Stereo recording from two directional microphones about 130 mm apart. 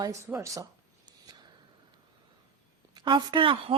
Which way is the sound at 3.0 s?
40° right (ahead or behind).